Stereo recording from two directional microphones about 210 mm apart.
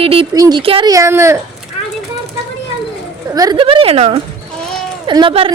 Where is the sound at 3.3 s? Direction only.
20° right (ahead or behind).